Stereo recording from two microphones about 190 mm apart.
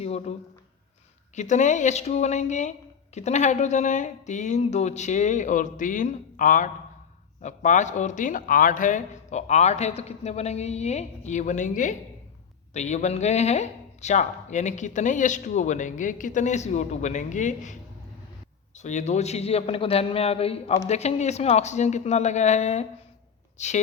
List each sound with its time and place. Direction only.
0.0 s a sound: 35° left (ahead or behind)
1.4 s speech: 40° left (ahead or behind)
18.8 s speech: 40° left (ahead or behind)